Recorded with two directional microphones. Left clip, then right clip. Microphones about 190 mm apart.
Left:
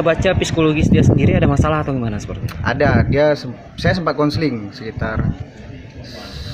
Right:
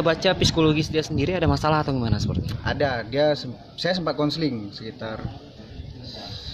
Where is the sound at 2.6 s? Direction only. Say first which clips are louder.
Left 8 dB; centre (ahead or behind).